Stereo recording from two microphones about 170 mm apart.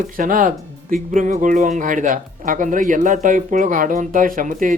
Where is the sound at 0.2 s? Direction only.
55° right (ahead or behind).